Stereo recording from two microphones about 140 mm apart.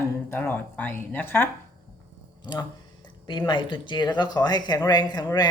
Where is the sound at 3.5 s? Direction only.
35° left (ahead or behind).